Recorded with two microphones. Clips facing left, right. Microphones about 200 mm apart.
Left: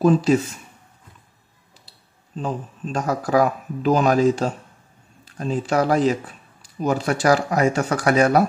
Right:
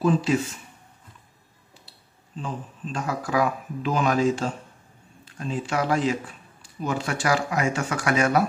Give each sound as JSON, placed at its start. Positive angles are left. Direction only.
{"t": 0.0, "sound": "a man's voice", "side_deg": 40}
{"t": 2.3, "sound": "a man's voice", "side_deg": 40}